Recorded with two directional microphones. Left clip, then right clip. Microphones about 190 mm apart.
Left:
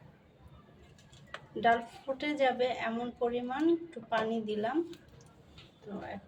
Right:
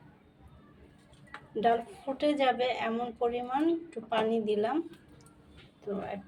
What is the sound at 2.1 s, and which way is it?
A woman's voice, 25° right (ahead or behind).